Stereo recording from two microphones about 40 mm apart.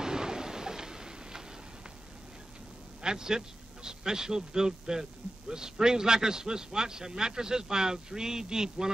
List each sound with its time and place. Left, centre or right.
0.0 s thunder: centre
3.0 s a man's voice: centre